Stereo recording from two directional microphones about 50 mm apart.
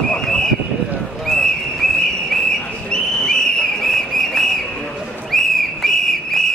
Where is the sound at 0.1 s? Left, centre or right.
Centre.